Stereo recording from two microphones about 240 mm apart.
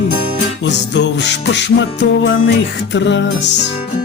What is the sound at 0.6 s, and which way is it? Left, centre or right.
Music, left.